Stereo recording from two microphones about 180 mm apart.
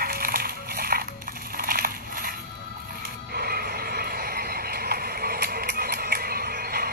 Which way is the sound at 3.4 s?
55° right (ahead or behind).